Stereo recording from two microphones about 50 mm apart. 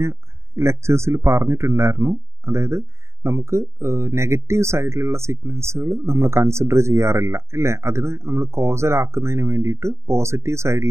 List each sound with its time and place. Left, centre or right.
0.0 s speech: right